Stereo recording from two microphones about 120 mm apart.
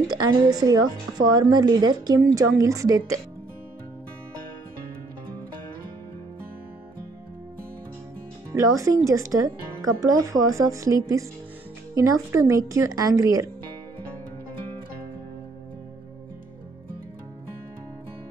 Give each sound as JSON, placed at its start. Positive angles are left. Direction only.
{"t": 0.1, "sound": "a woman's voice", "side_deg": -30}
{"t": 8.5, "sound": "a woman's voice", "side_deg": -25}